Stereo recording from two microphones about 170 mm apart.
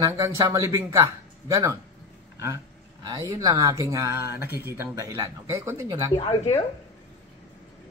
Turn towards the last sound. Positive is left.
turn(degrees=20)  # may be behind; listen again after turning